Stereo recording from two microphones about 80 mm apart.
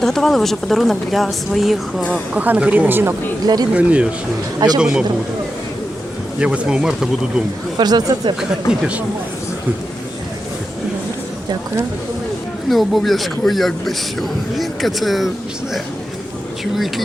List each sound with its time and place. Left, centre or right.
0.0 s a man's voice: centre
2.3 s speech: centre
3.4 s speech: right
3.7 s speech: centre
6.4 s speech: centre
7.8 s speech: right
8.4 s speech: centre
12.7 s a man's voice: centre